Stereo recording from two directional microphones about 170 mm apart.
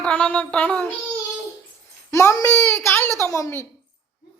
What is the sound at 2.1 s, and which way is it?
A woman's voice, 20° left (ahead or behind).